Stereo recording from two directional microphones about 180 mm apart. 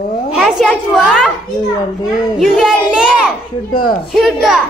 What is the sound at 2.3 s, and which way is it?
A child's voice, centre (ahead or behind).